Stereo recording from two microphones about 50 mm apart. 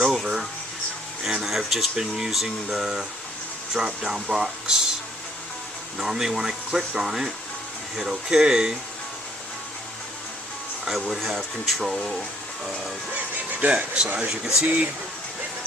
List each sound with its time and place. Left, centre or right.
0.0 s music: centre
1.2 s speech: centre
6.0 s speech: centre
10.8 s speech: centre
13.1 s a sound: right
13.7 s speech: right